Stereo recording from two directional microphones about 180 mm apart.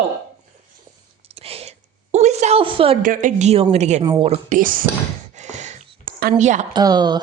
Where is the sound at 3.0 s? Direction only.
45° right (ahead or behind).